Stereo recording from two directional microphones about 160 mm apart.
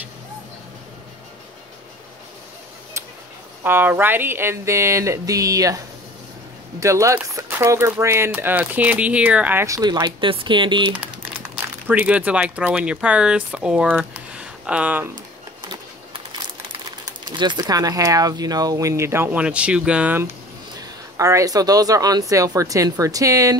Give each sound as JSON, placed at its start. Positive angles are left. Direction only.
{"t": 3.6, "sound": "speech", "side_deg": -10}
{"t": 6.8, "sound": "speech", "side_deg": -20}
{"t": 11.5, "sound": "speech", "side_deg": -10}
{"t": 15.6, "sound": "a sound", "side_deg": -30}
{"t": 17.0, "sound": "speech", "side_deg": -30}
{"t": 20.8, "sound": "speech", "side_deg": -20}